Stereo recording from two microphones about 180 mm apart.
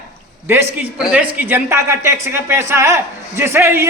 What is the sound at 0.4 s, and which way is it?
A man's voice, 15° right (ahead or behind).